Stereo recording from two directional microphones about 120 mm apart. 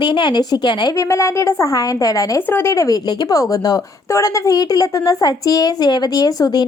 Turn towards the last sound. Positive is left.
turn(degrees=30)  # may be behind; listen again after turning